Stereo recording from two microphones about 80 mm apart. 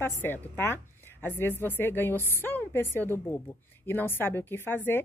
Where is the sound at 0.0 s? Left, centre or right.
Left.